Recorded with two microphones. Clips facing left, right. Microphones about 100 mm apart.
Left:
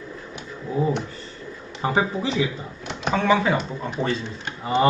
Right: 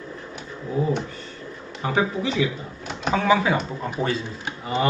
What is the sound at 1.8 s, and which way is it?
Speech, 30° left (ahead or behind).